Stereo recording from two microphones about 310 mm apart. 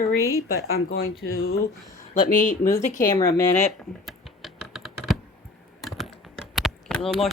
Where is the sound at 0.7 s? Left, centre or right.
Left.